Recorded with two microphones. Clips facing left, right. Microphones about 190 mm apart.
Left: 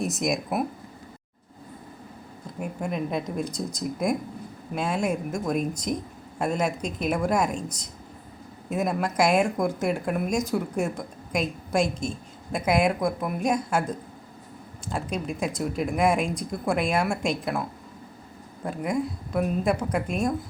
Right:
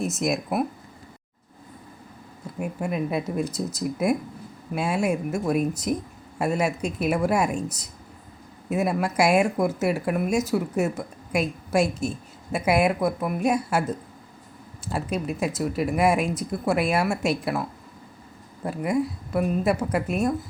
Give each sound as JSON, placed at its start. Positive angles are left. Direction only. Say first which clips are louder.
{"t": 0.0, "sound": "speech", "louder": "right 1 dB", "side_deg": 0}
{"t": 2.6, "sound": "speech", "louder": "right 2 dB", "side_deg": -5}